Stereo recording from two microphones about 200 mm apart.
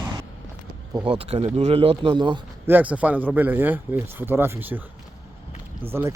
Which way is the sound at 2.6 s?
10° right (ahead or behind).